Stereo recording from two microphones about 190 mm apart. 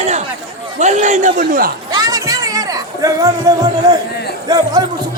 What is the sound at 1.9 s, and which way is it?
Music, 20° right (ahead or behind).